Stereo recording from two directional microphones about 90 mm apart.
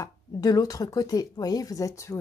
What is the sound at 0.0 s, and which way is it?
Speech, 45° left (ahead or behind).